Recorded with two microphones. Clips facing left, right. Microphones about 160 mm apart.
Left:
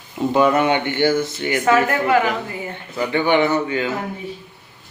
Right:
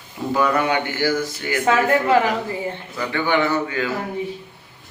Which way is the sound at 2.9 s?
20° left (ahead or behind).